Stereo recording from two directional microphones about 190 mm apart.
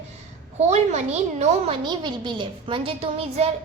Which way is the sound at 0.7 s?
35° right (ahead or behind).